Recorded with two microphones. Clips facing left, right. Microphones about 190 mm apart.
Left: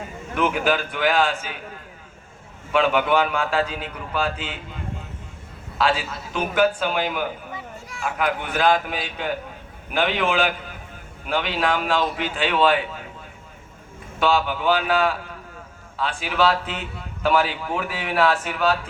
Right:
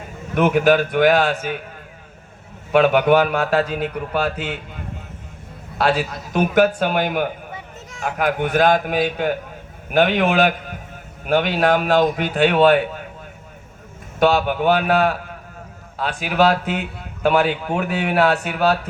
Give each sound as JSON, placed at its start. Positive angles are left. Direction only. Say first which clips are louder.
{"t": 0.5, "sound": "speech", "louder": "right 10 dB", "side_deg": -40}
{"t": 0.8, "sound": "a man's voice", "louder": "right 11 dB", "side_deg": -60}
{"t": 1.0, "sound": "speech", "louder": "right 4 dB", "side_deg": -45}
{"t": 1.3, "sound": "a man's voice", "louder": "right 6 dB", "side_deg": -60}
{"t": 2.7, "sound": "speech", "louder": "right 5 dB", "side_deg": -50}
{"t": 3.6, "sound": "a man's voice", "louder": "right 4 dB", "side_deg": -60}
{"t": 6.4, "sound": "a man's voice", "louder": "right 4 dB", "side_deg": -60}
{"t": 8.0, "sound": "speech", "louder": "right 4 dB", "side_deg": -45}
{"t": 12.5, "sound": "speech", "louder": "right 3 dB", "side_deg": -50}
{"t": 14.3, "sound": "speech", "louder": "right 4 dB", "side_deg": -55}